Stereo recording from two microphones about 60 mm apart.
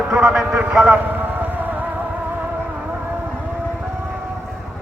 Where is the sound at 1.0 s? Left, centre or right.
Right.